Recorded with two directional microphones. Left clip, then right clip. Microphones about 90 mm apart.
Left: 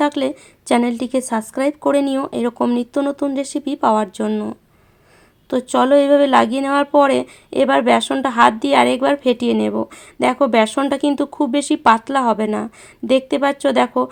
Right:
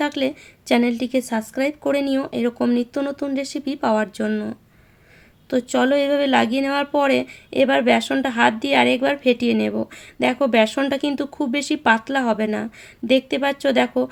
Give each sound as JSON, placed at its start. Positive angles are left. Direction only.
{"t": 0.0, "sound": "speech", "side_deg": 35}